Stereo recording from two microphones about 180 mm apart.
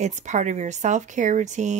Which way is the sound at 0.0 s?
40° right (ahead or behind).